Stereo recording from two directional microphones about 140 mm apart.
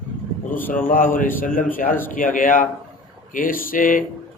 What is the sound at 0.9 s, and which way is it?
Speech, 80° left.